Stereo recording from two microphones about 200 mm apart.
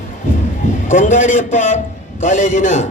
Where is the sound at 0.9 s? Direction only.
40° left (ahead or behind).